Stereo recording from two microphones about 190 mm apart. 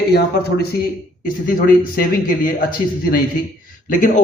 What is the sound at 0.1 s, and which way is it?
Speech, 55° left (ahead or behind).